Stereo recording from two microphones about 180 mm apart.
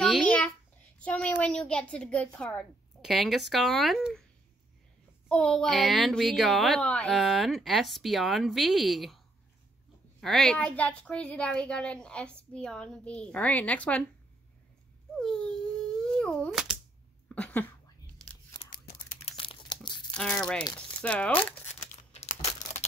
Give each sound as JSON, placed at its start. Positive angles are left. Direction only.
{"t": 0.0, "sound": "a sound", "side_deg": 5}
{"t": 0.9, "sound": "a child's voice", "side_deg": 5}
{"t": 5.3, "sound": "a child's voice", "side_deg": 5}
{"t": 10.2, "sound": "a child's voice", "side_deg": 5}
{"t": 15.1, "sound": "dog", "side_deg": 5}
{"t": 16.0, "sound": "speech", "side_deg": 5}
{"t": 18.1, "sound": "tearing", "side_deg": 5}
{"t": 19.2, "sound": "crumpling", "side_deg": 30}
{"t": 20.2, "sound": "a child's voice", "side_deg": 5}
{"t": 21.6, "sound": "tearing", "side_deg": 35}